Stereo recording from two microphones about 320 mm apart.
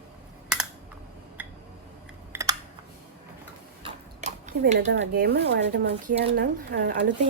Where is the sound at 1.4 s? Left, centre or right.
Centre.